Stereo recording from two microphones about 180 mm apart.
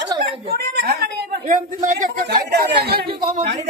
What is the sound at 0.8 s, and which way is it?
Speech, 60° right (ahead or behind).